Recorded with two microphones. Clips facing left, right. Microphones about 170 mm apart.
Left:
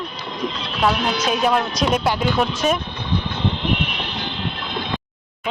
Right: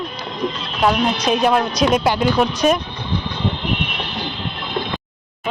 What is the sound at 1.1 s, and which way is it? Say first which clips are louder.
Speech: right 3 dB; 5° left (ahead or behind).